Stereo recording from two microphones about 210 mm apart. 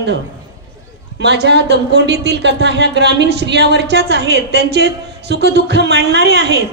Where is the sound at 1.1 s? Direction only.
55° right (ahead or behind).